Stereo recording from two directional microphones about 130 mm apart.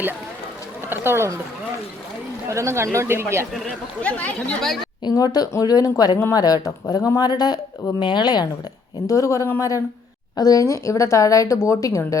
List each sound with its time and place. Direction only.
0.9 s speech: 20° right (ahead or behind)
2.5 s speech: 20° right (ahead or behind)
4.0 s speech: 10° left (ahead or behind)
5.0 s speech: 30° left (ahead or behind)